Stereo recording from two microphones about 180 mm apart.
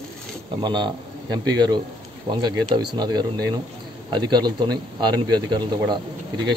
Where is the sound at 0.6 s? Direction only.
25° right (ahead or behind).